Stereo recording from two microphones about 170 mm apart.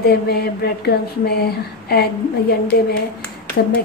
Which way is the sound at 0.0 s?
70° left (ahead or behind).